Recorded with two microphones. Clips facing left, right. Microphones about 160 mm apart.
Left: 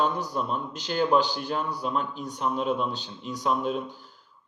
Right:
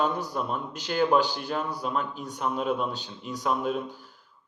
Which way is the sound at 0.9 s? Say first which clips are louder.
Even; 50° right (ahead or behind).